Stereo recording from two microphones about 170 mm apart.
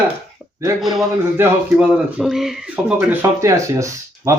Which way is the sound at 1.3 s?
10° right (ahead or behind).